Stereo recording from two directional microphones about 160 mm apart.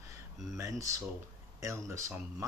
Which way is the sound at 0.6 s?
20° right (ahead or behind).